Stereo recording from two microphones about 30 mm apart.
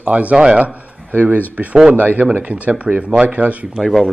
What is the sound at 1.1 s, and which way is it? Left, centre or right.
Speech, right.